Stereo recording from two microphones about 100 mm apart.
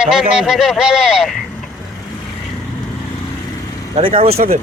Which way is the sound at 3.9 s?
60° right (ahead or behind).